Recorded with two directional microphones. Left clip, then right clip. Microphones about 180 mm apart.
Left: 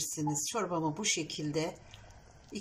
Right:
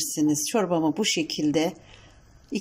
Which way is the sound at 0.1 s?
45° right (ahead or behind).